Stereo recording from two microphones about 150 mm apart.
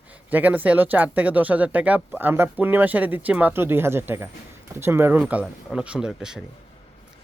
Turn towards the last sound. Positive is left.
turn(degrees=-5)  # may be behind; listen again after turning